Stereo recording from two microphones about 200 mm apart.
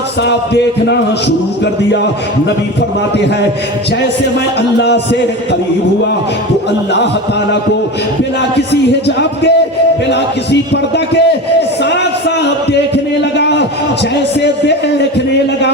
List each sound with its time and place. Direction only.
0.2 s a man's voice: 55° left (ahead or behind)
4.8 s a man's voice: 60° left (ahead or behind)
8.7 s a man's voice: 60° left (ahead or behind)
13.3 s a sound: 60° left (ahead or behind)
14.4 s a man's voice: 60° left (ahead or behind)